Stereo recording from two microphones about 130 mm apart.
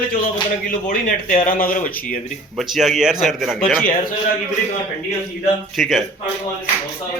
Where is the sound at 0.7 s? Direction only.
90° left.